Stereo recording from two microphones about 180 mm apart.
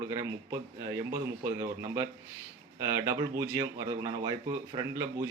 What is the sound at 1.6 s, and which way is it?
A man's voice, 15° right (ahead or behind).